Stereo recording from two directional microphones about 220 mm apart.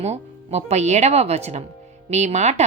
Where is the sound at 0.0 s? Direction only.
30° right (ahead or behind).